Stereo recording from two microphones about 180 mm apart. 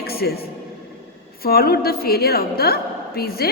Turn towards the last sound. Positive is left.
turn(degrees=55)  # may be behind; listen again after turning